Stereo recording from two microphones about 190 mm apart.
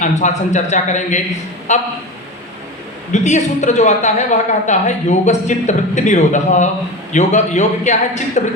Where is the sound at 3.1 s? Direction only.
40° left (ahead or behind).